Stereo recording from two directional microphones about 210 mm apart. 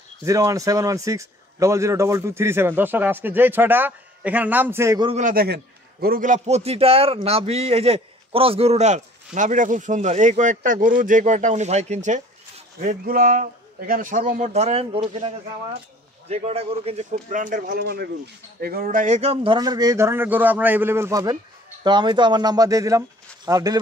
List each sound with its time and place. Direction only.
0.2 s speech: 15° right (ahead or behind)
5.1 s a man's voice: 40° right (ahead or behind); by 23.8 s 20° right (ahead or behind)